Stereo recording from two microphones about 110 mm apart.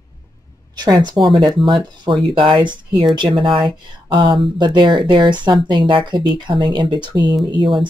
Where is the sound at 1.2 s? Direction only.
Centre (ahead or behind).